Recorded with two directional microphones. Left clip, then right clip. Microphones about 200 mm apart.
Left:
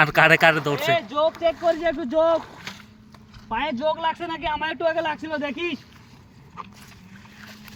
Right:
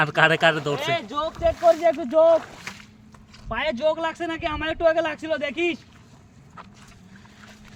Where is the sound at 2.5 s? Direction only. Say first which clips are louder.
Even; 30° left (ahead or behind).